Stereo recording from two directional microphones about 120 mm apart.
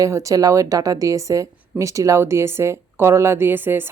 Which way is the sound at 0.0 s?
25° right (ahead or behind).